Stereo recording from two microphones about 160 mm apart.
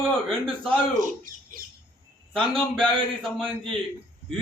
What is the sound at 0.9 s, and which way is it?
Speech, 55° right (ahead or behind).